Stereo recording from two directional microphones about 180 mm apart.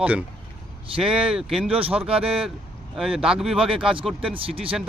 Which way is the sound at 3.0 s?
Centre (ahead or behind).